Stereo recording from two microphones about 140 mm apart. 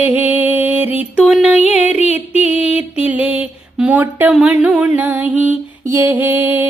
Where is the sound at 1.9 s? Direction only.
50° left (ahead or behind).